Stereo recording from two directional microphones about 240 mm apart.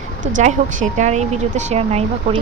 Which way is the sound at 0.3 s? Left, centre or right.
Right.